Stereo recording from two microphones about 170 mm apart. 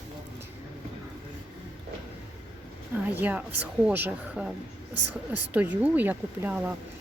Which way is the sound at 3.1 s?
10° right (ahead or behind).